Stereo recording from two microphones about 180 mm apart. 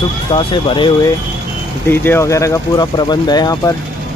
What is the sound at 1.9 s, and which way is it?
Speech, 15° left (ahead or behind).